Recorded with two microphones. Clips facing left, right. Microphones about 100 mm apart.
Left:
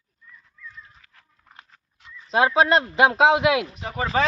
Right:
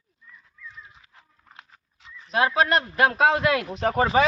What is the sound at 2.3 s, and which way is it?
Speech, 25° left (ahead or behind).